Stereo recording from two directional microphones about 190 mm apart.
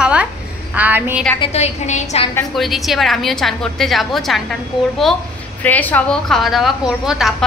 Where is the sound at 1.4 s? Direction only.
35° left (ahead or behind).